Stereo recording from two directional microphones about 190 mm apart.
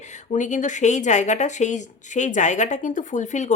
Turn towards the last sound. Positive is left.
turn(degrees=40)  # may be behind; listen again after turning